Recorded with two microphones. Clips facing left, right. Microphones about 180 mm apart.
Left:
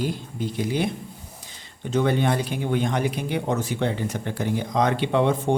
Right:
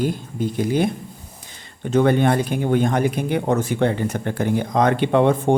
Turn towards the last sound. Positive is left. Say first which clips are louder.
# right 5 dB
turn(degrees=-50)  # may be behind; listen again after turning